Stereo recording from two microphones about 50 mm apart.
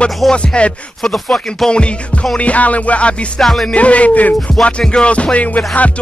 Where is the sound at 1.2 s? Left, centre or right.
Centre.